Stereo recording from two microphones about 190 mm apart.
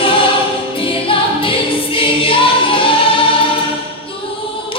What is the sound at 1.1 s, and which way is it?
Music, 30° left (ahead or behind).